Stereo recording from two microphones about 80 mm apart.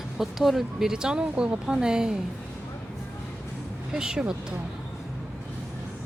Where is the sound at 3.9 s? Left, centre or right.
Centre.